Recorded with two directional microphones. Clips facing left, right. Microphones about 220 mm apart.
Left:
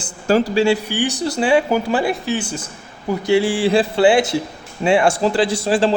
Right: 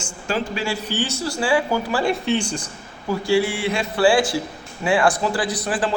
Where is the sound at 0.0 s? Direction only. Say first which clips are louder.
Left 8 dB; 35° left (ahead or behind).